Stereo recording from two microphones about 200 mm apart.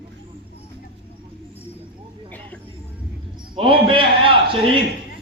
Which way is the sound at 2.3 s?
10° left (ahead or behind).